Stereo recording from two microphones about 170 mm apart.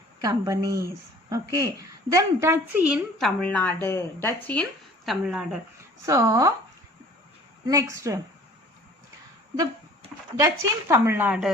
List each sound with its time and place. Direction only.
0.2 s a woman's voice: 20° right (ahead or behind); by 4.4 s 15° left (ahead or behind)
5.0 s a woman's voice: 5° right (ahead or behind)
6.1 s speech: 20° right (ahead or behind)
7.7 s a woman's voice: 20° right (ahead or behind)
10.3 s a woman's voice: 20° right (ahead or behind)